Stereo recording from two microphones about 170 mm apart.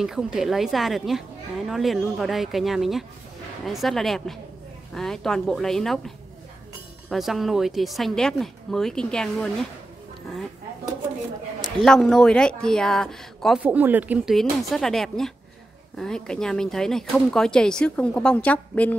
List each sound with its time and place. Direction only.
0.0 s speech: 5° right (ahead or behind)
11.6 s speech: centre (ahead or behind)
13.6 s speech: 10° right (ahead or behind); by 18.9 s 10° left (ahead or behind)